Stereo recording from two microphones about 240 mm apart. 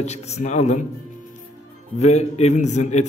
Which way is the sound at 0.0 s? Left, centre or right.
Left.